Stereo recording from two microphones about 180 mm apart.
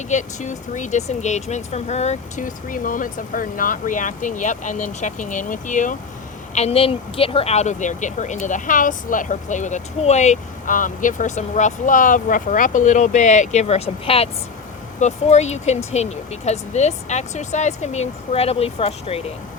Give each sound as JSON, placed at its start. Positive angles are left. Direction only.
{"t": 0.1, "sound": "speech", "side_deg": 40}